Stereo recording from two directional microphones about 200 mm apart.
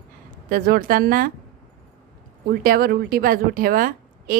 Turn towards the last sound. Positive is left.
turn(degrees=-45)  # may be behind; listen again after turning